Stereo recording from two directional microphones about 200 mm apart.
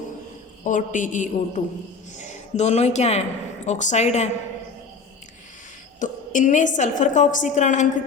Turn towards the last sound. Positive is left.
turn(degrees=35)  # may be behind; listen again after turning